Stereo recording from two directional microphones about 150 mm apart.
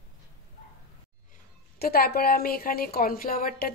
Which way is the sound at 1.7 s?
90° left.